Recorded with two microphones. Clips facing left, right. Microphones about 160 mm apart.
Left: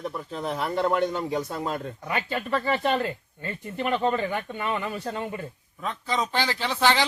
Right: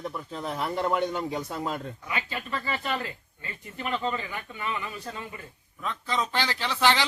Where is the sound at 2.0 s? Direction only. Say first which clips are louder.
Left 5 dB; 50° left (ahead or behind).